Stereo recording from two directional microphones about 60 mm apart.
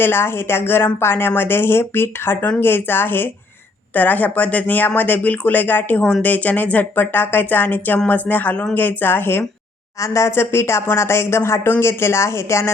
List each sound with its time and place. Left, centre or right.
0.0 s speech: left
10.0 s speech: left